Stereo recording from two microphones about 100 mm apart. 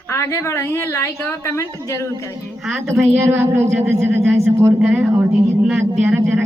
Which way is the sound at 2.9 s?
25° right (ahead or behind).